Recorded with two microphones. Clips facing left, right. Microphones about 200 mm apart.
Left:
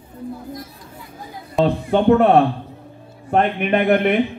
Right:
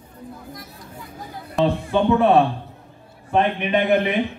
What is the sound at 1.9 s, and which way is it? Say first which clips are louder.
A man's voice: left 4 dB; 60° left (ahead or behind).